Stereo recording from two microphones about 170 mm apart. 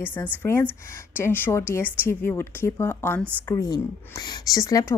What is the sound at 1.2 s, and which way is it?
Speech, 15° left (ahead or behind).